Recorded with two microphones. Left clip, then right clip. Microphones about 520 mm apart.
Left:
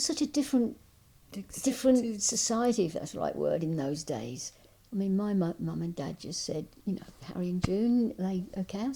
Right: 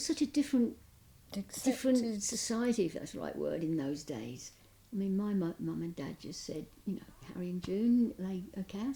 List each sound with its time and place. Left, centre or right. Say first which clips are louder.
0.0 s speech: left 3 dB; left
1.3 s a woman's voice: even; centre
1.6 s speech: left 5 dB; left